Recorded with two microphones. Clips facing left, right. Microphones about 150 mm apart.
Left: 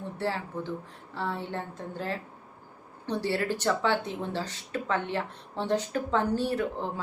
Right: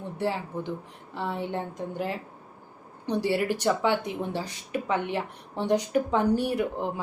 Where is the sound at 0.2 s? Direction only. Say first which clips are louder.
Right 3 dB; 15° right (ahead or behind).